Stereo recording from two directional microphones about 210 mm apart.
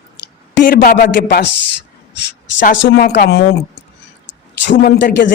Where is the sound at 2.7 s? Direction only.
50° left (ahead or behind).